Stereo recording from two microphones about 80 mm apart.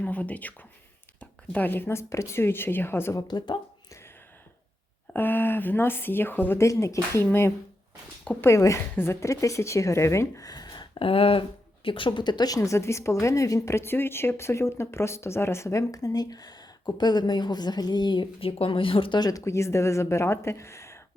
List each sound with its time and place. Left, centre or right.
0.0 s speech: centre
3.2 s speech: left
5.1 s speech: left
6.6 s a woman's voice: left
8.4 s a woman's voice: left
11.9 s a woman's voice: left
12.5 s a woman's voice: left
18.7 s speech: left
19.3 s a woman's voice: left